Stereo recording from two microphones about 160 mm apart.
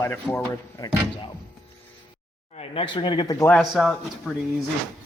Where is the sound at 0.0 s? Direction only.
15° left (ahead or behind).